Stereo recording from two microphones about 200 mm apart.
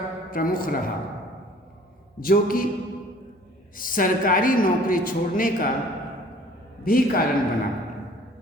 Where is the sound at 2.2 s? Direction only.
45° left (ahead or behind).